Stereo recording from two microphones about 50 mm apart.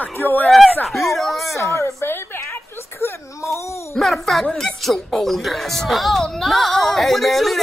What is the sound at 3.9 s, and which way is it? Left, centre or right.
A child's voice, centre.